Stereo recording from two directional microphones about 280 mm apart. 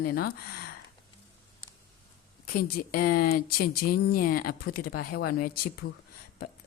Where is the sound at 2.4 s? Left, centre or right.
Left.